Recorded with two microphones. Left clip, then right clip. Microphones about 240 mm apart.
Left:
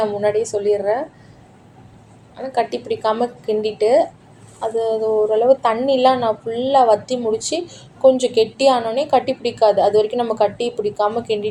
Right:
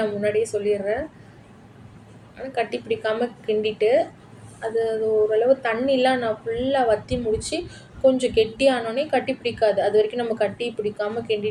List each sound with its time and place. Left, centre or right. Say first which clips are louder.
0.0 s a woman's voice: left 4 dB; left
2.4 s a woman's voice: left 5 dB; left
5.3 s a woman's voice: left 5 dB; left